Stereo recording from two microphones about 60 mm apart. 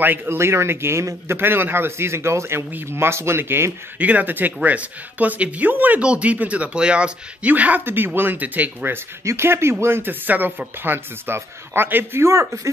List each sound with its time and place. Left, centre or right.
0.0 s speech: right
0.4 s a man's voice: right
4.0 s speech: right
9.2 s speech: right
12.3 s speech: right